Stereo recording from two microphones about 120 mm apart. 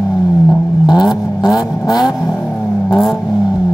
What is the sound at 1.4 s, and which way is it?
Vehicle, 30° left (ahead or behind).